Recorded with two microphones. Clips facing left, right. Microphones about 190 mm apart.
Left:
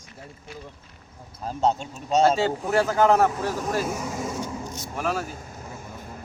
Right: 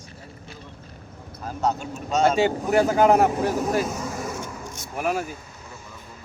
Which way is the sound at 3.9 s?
10° left (ahead or behind).